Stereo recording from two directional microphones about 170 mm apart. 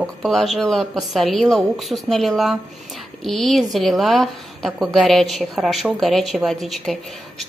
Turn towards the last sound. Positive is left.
turn(degrees=0)  # may be behind; listen again after turning